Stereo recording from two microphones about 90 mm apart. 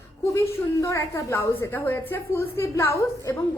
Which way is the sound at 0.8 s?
35° left (ahead or behind).